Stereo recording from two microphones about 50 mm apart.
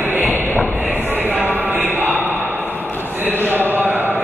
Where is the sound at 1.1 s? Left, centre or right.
Right.